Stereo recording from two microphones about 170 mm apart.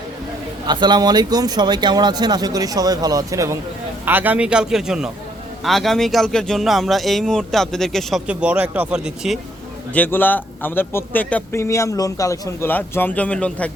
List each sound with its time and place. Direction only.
0.7 s speech: 25° right (ahead or behind); by 9.4 s 5° right (ahead or behind)
9.9 s a man's voice: 10° left (ahead or behind)